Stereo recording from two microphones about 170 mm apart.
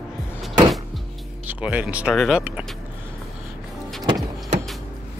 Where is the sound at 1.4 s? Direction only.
10° right (ahead or behind).